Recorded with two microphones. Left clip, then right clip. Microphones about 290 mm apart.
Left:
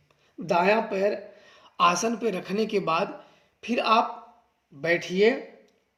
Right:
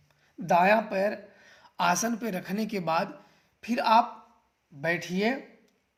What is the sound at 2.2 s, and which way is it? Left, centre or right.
Speech, right.